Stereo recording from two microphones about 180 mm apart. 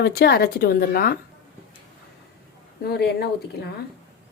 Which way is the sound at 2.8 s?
65° left (ahead or behind).